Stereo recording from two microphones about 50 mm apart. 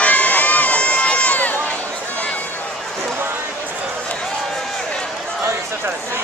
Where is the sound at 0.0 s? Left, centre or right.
Left.